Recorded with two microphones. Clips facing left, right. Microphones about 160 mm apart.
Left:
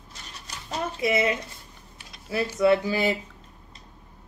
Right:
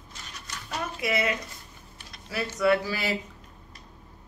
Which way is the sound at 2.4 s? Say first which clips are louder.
Left 3 dB; 20° left (ahead or behind).